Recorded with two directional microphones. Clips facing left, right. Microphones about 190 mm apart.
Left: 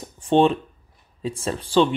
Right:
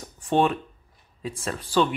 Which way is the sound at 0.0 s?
25° left (ahead or behind).